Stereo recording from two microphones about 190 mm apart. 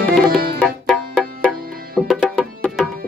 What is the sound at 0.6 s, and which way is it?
Music, 5° left (ahead or behind).